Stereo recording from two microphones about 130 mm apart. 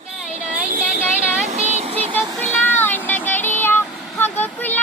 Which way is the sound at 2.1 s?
15° left (ahead or behind).